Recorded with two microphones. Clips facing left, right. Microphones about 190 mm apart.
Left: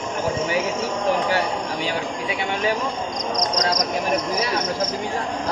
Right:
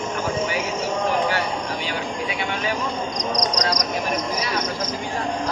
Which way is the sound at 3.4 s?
25° left (ahead or behind).